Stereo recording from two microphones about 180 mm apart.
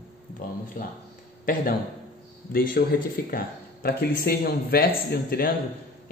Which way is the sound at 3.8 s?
60° left (ahead or behind).